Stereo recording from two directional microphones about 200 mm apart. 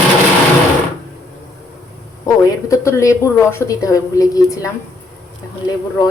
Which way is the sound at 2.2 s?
15° left (ahead or behind).